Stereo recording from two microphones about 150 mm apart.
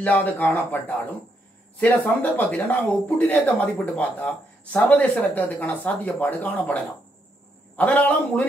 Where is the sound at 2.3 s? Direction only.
10° left (ahead or behind).